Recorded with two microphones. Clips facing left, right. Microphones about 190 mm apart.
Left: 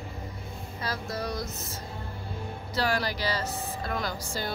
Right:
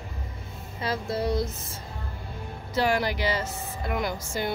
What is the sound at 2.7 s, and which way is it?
Speech, 20° right (ahead or behind).